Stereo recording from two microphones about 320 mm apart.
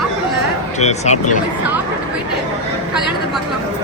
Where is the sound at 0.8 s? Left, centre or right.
Left.